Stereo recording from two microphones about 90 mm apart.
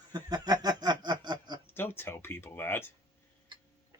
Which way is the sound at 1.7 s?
25° left (ahead or behind).